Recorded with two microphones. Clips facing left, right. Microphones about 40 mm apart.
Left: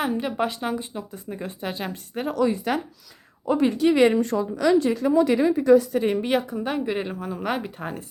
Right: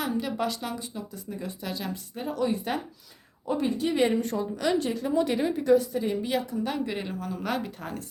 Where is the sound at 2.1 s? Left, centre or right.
Left.